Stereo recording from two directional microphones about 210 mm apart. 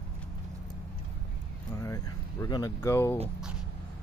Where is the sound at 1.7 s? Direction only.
15° left (ahead or behind).